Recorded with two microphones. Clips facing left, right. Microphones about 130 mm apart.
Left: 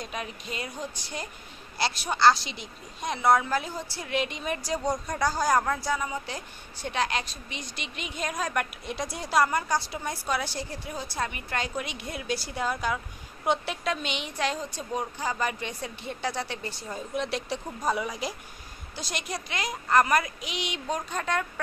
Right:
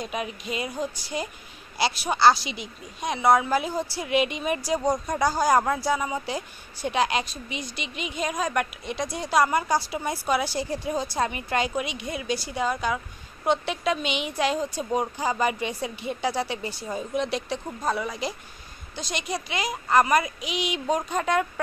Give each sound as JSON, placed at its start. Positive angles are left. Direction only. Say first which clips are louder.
{"t": 0.0, "sound": "speech", "louder": "right 5 dB", "side_deg": -10}
{"t": 4.9, "sound": "speech", "louder": "right 4 dB", "side_deg": -25}
{"t": 5.2, "sound": "a woman's voice", "louder": "right 3 dB", "side_deg": -10}
{"t": 10.9, "sound": "a woman's voice", "louder": "right 6 dB", "side_deg": -20}